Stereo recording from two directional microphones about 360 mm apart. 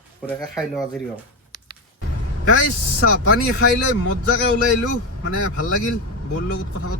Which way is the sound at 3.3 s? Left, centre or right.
Left.